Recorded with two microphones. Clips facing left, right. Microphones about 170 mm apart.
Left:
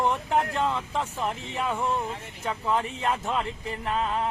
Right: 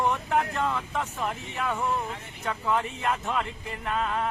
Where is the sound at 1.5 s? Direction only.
15° left (ahead or behind).